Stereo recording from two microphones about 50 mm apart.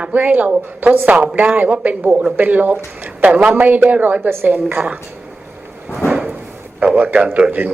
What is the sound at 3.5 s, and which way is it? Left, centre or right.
A woman's voice, right.